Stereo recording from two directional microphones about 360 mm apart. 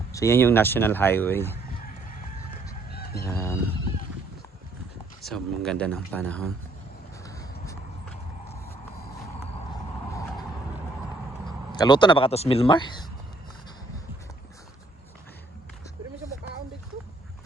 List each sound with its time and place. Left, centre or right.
0.1 s speech: centre
1.8 s a sound: left
2.9 s fowl: left
3.2 s fowl: centre
5.2 s speech: centre
7.3 s a sound: centre
10.1 s vehicle: centre
11.7 s speech: centre